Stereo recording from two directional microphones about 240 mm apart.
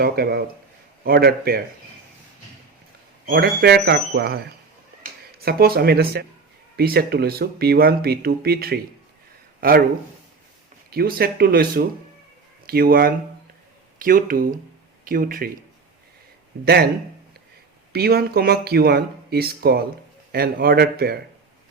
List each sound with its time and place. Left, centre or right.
0.0 s speech: right
3.2 s speech: right
5.4 s speech: right
10.9 s speech: right
16.6 s speech: right
17.9 s speech: right